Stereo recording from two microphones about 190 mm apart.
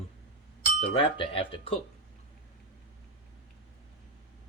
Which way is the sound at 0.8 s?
25° left (ahead or behind).